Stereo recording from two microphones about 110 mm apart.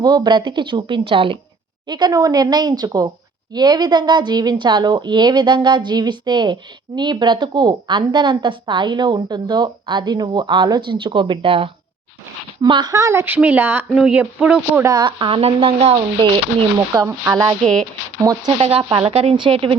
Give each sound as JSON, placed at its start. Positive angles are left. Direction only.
{"t": 0.0, "sound": "a woman's voice", "side_deg": -40}
{"t": 1.9, "sound": "a woman's voice", "side_deg": -40}
{"t": 12.9, "sound": "a woman's voice", "side_deg": -30}
{"t": 14.8, "sound": "speech", "side_deg": -40}
{"t": 17.0, "sound": "speech", "side_deg": -30}
{"t": 18.4, "sound": "a woman's voice", "side_deg": -55}